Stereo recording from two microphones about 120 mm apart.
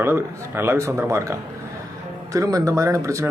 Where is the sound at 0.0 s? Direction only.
20° right (ahead or behind).